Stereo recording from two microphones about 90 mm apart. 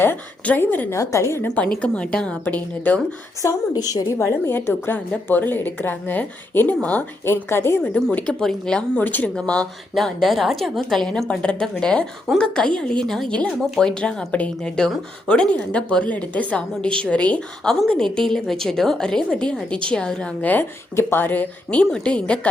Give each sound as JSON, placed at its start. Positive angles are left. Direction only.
{"t": 0.0, "sound": "a woman's voice", "side_deg": 20}
{"t": 0.9, "sound": "a woman's voice", "side_deg": 30}
{"t": 1.5, "sound": "a woman's voice", "side_deg": 15}
{"t": 3.4, "sound": "a woman's voice", "side_deg": 40}
{"t": 4.2, "sound": "a woman's voice", "side_deg": 30}
{"t": 8.1, "sound": "a woman's voice", "side_deg": 10}
{"t": 9.0, "sound": "a woman's voice", "side_deg": 20}